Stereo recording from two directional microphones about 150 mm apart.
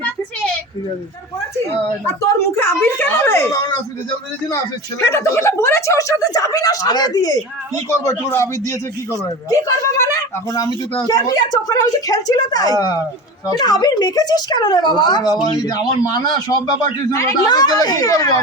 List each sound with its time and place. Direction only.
2.6 s speech: 15° left (ahead or behind)
4.9 s a woman's voice: 20° left (ahead or behind)